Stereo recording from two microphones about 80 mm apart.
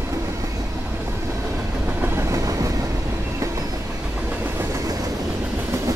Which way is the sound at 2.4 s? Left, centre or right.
Right.